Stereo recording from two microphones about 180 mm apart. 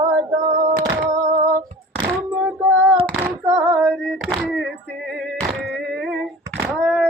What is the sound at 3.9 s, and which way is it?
Hands, 5° left (ahead or behind).